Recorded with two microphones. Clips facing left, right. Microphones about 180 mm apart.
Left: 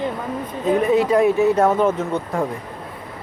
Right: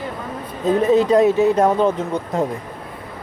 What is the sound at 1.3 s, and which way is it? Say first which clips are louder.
Speech: right 1 dB; 20° right (ahead or behind).